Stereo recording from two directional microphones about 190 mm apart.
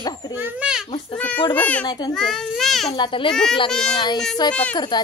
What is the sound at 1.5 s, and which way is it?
Speech, 10° left (ahead or behind).